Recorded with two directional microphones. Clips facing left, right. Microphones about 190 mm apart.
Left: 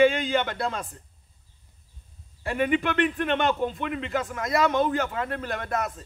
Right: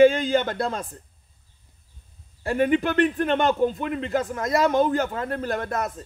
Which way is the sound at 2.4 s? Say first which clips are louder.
Right 3 dB; 40° right (ahead or behind).